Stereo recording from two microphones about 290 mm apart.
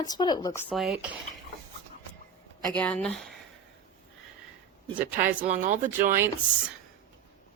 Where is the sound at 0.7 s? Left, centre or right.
Centre.